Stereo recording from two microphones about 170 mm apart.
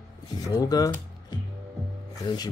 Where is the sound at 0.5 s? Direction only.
20° left (ahead or behind).